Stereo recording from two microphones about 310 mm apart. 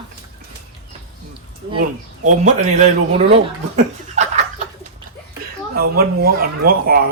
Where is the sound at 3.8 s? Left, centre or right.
Right.